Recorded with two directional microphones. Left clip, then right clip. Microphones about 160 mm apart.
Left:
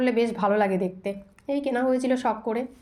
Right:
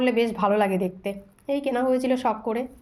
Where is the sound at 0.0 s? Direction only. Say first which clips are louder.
Right 1 dB; 10° right (ahead or behind).